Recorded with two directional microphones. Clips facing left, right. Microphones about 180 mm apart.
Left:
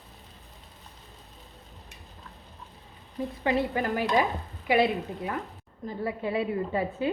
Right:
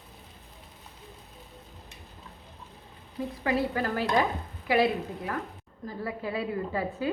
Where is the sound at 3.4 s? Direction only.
20° left (ahead or behind).